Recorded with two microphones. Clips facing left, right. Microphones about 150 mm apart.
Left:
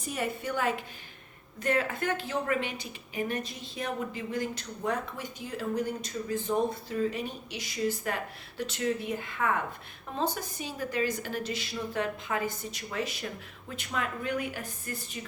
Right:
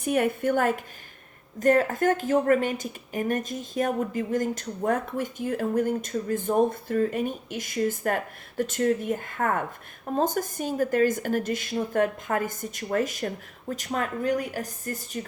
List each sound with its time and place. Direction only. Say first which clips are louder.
0.0 s a woman's voice: right 9 dB; 60° right (ahead or behind); by 15.2 s 40° right (ahead or behind)